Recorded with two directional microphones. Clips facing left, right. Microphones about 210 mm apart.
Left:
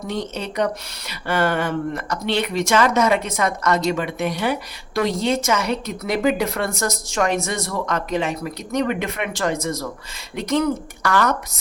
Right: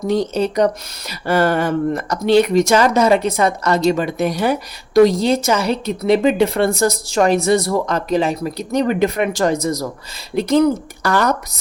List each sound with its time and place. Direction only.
0.1 s a woman's voice: 35° right (ahead or behind)